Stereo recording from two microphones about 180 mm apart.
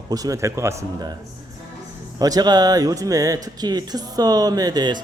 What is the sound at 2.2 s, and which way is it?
Speech, 20° right (ahead or behind).